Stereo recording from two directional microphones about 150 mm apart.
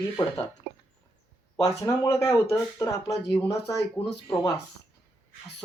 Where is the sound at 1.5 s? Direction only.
25° left (ahead or behind).